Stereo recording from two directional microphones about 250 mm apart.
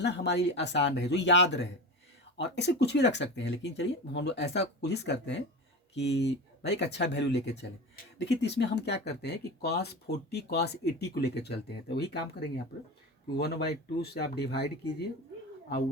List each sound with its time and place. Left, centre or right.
0.0 s speech: left
13.4 s speech: left